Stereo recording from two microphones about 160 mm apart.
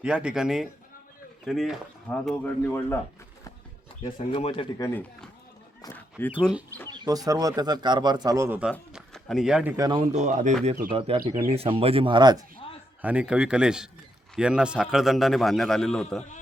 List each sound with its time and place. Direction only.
0.0 s a man's voice: 5° right (ahead or behind); by 3.0 s 15° left (ahead or behind)
4.0 s speech: 40° left (ahead or behind)
4.8 s a man's voice: 15° left (ahead or behind)
5.9 s a sound: 15° left (ahead or behind)
6.8 s speech: 25° right (ahead or behind)
8.9 s a sound: centre (ahead or behind)
9.7 s speech: 25° right (ahead or behind)
10.1 s speech: 50° right (ahead or behind)
10.9 s speech: 35° right (ahead or behind)
13.0 s a man's voice: 10° right (ahead or behind)